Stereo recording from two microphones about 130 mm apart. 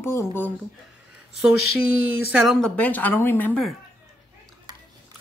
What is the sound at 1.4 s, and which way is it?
Speech, 5° right (ahead or behind).